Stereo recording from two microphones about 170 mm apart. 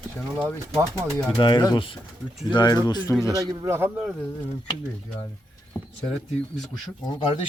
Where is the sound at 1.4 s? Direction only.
25° left (ahead or behind).